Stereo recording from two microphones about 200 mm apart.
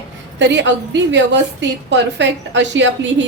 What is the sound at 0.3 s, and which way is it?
A woman's voice, 65° right (ahead or behind).